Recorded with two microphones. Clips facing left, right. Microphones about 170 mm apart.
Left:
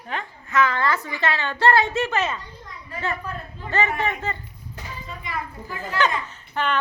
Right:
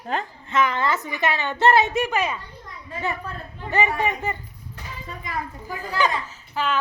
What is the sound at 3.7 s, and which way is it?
Speech, 15° right (ahead or behind).